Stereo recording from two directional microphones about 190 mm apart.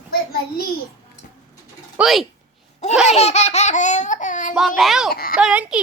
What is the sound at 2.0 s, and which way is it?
Speech, centre (ahead or behind).